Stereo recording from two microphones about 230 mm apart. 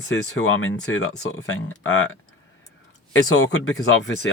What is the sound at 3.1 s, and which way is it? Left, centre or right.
Speech, left.